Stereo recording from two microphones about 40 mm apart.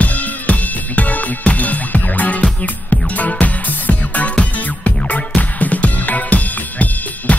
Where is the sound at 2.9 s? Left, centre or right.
Left.